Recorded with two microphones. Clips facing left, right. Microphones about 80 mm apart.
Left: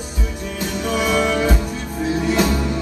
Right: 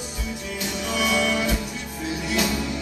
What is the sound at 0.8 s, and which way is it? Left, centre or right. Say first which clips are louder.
Music: left 5 dB; left.